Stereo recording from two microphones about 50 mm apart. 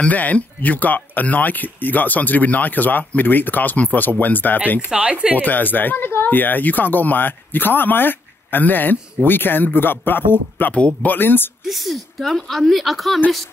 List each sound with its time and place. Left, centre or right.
0.0 s speech: left
4.9 s speech: right
5.3 s speech: left
11.6 s speech: centre